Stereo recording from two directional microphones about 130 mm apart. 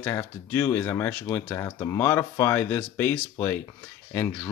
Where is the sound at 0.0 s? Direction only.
15° left (ahead or behind).